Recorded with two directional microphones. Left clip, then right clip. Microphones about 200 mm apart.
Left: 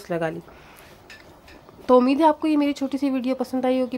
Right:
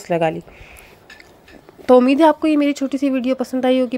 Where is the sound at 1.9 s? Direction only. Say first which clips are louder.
Right 5 dB; 25° right (ahead or behind).